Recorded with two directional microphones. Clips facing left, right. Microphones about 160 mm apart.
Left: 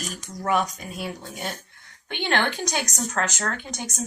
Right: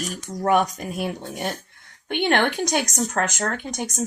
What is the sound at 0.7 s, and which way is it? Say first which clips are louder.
Speech: right 6 dB; 60° right (ahead or behind).